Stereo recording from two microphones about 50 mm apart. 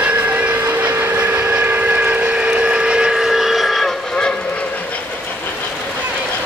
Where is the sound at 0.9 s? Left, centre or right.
Right; by 3.9 s centre.